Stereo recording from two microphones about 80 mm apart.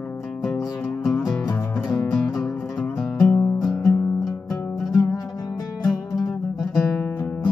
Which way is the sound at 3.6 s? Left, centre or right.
Centre.